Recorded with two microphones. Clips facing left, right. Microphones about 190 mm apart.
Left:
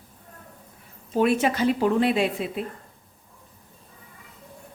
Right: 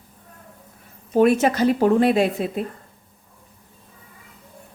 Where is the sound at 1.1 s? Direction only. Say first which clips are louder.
Right 5 dB; 45° right (ahead or behind).